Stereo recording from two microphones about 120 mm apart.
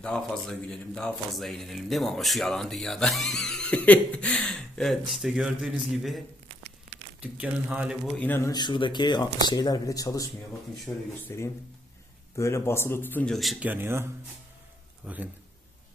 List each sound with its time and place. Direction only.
0.0 s speech: 5° left (ahead or behind); by 7.9 s 10° right (ahead or behind)
8.0 s speech: 10° left (ahead or behind)
8.5 s speech: 40° left (ahead or behind)
11.3 s speech: 25° left (ahead or behind)
13.3 s speech: centre (ahead or behind)
13.6 s speech: 15° right (ahead or behind)